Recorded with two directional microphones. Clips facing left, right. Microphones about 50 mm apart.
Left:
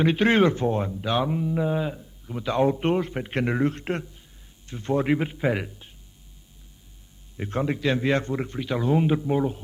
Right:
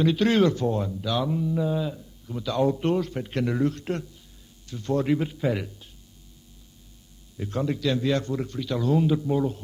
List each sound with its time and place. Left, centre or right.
0.0 s a man's voice: left
7.3 s a man's voice: left
9.0 s a man's voice: left